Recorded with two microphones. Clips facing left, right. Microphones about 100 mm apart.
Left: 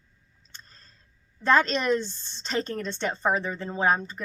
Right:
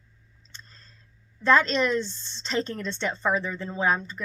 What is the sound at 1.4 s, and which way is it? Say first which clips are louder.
Speech: right 1 dB; 45° left (ahead or behind).